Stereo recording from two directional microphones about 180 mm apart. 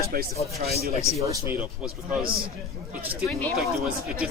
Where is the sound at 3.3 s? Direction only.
10° left (ahead or behind).